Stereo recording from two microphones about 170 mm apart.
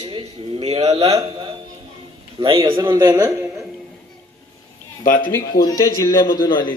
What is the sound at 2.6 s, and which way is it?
Speech, 20° right (ahead or behind).